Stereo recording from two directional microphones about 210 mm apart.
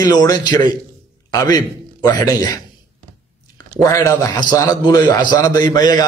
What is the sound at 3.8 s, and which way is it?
A man's voice, 15° left (ahead or behind).